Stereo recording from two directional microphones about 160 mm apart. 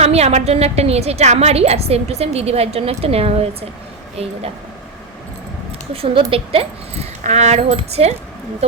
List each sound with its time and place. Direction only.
0.0 s a woman's voice: 40° right (ahead or behind)
5.9 s a woman's voice: 35° right (ahead or behind)